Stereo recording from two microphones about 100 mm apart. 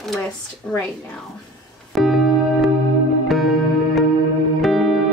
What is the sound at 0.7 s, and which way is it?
Speech, 5° left (ahead or behind).